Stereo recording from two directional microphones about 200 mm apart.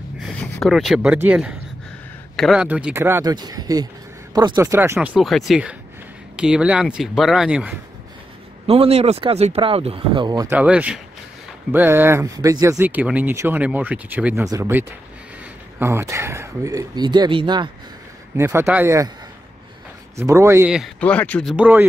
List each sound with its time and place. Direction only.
0.2 s speech: centre (ahead or behind)
8.6 s speech: 30° right (ahead or behind)
10.5 s speech: 5° right (ahead or behind); by 17.6 s 25° right (ahead or behind)
18.3 s speech: 15° right (ahead or behind)
20.2 s speech: 15° right (ahead or behind)
21.0 s speech: 5° left (ahead or behind)
21.5 s speech: 10° right (ahead or behind)